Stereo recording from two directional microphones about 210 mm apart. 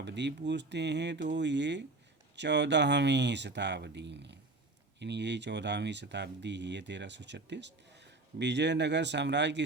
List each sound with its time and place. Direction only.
0.0 s speech: 55° right (ahead or behind)